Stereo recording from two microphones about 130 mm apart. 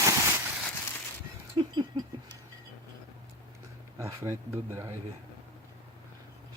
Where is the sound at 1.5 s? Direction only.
35° right (ahead or behind).